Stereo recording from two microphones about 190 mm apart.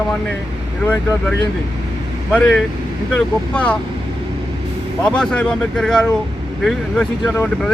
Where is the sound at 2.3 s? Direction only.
5° left (ahead or behind).